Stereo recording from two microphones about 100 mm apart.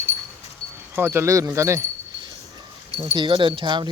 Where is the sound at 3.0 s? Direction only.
55° right (ahead or behind).